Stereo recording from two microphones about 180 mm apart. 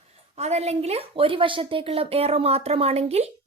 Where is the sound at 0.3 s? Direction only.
35° right (ahead or behind).